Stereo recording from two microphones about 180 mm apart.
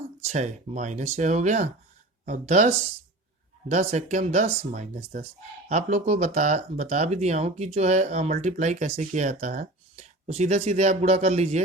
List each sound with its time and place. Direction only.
0.3 s speech: 40° right (ahead or behind)